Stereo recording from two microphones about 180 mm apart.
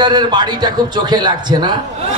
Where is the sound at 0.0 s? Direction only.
25° right (ahead or behind).